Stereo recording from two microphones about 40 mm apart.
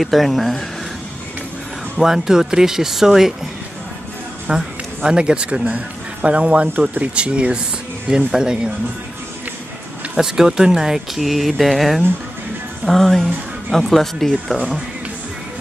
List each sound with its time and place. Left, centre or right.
0.0 s speech: centre
2.0 s speech: centre
4.5 s speech: centre
10.1 s speech: centre